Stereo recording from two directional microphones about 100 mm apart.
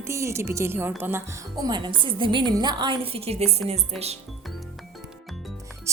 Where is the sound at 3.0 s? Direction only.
75° right (ahead or behind).